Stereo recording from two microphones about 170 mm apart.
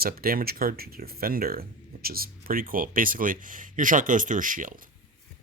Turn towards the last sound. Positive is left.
turn(degrees=-50)  # may be behind; listen again after turning